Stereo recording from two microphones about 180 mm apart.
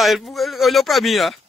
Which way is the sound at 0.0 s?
Centre (ahead or behind).